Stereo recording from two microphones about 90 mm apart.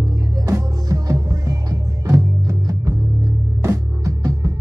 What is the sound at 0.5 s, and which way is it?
Music, 40° right (ahead or behind).